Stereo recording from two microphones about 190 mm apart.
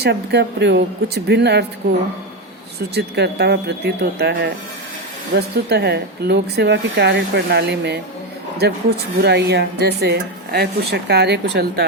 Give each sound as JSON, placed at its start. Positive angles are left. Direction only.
{"t": 0.0, "sound": "speech", "side_deg": -60}
{"t": 9.1, "sound": "speech", "side_deg": -60}